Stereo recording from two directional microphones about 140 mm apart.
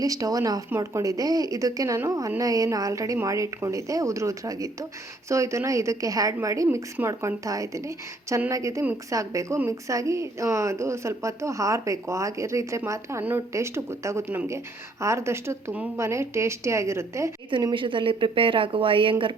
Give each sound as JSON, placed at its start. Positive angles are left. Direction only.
{"t": 0.0, "sound": "speech", "side_deg": -25}
{"t": 17.5, "sound": "a woman's voice", "side_deg": -35}